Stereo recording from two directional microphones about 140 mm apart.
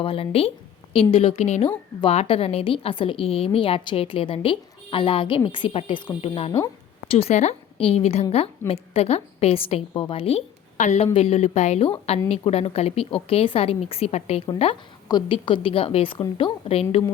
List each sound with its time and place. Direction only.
0.0 s a woman's voice: 40° left (ahead or behind)
11.0 s a woman's voice: 45° left (ahead or behind)
15.0 s a woman's voice: 35° left (ahead or behind)